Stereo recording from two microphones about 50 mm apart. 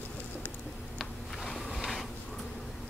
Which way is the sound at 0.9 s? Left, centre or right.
Centre.